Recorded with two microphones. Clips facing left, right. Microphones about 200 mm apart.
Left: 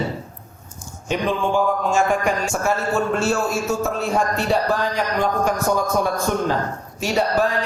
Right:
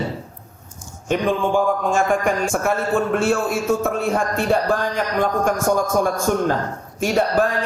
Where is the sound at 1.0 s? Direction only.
50° right (ahead or behind).